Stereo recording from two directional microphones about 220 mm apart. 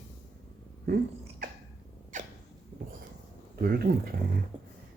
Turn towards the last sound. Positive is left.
turn(degrees=-25)  # may be behind; listen again after turning